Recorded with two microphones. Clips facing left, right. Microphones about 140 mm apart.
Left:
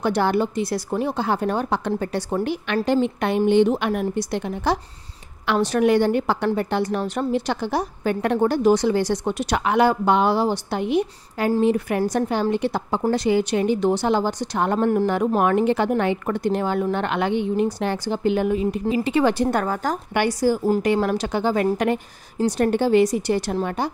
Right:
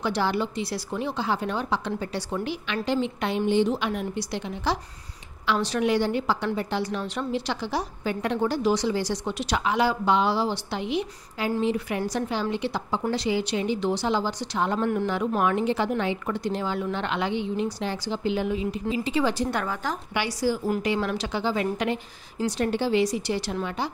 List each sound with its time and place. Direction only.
0.0 s a woman's voice: 50° left (ahead or behind)